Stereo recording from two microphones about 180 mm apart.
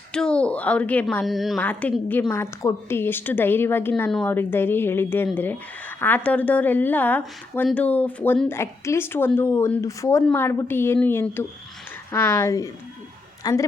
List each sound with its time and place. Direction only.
0.1 s a woman's voice: 5° left (ahead or behind)